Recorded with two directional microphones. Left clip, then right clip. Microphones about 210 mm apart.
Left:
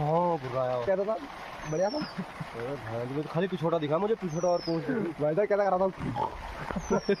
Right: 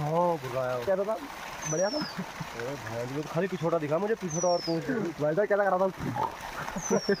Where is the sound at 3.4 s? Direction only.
20° left (ahead or behind).